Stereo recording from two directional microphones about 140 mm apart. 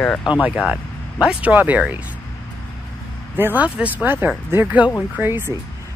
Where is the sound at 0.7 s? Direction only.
5° right (ahead or behind).